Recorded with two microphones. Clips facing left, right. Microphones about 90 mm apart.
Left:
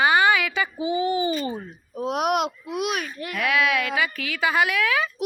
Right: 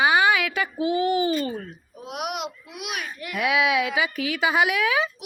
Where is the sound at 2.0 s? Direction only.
40° left (ahead or behind).